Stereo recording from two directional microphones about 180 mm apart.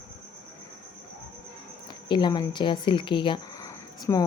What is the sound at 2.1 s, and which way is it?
Speech, 25° left (ahead or behind).